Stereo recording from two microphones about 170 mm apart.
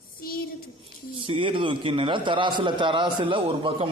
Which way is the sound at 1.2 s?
30° right (ahead or behind).